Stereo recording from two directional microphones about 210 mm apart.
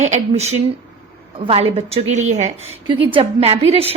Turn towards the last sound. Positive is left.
turn(degrees=-30)  # may be behind; listen again after turning